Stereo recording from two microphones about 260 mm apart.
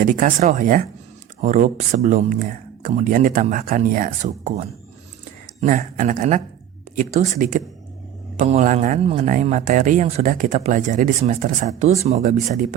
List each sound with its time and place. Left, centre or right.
0.0 s speech: right